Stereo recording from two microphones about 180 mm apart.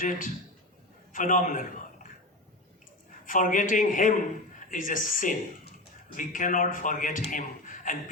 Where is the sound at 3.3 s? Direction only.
45° left (ahead or behind).